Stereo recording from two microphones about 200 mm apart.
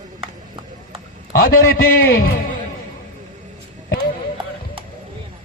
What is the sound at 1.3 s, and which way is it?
A man's voice, 45° left (ahead or behind).